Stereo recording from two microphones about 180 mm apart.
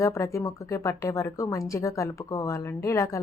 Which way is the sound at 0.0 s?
15° left (ahead or behind).